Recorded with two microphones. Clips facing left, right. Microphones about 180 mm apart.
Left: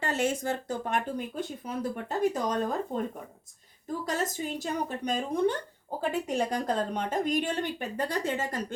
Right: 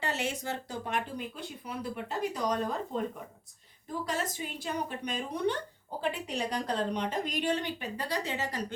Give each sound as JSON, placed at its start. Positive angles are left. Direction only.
{"t": 0.0, "sound": "speech", "side_deg": 50}
{"t": 4.0, "sound": "speech", "side_deg": 45}